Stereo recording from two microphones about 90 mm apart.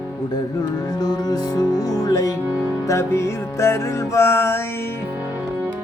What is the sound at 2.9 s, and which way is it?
Music, 30° left (ahead or behind).